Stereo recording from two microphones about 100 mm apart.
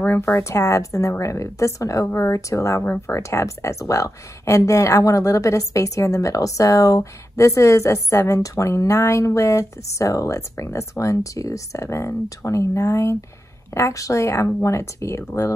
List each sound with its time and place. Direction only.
0.0 s a woman's voice: 25° left (ahead or behind)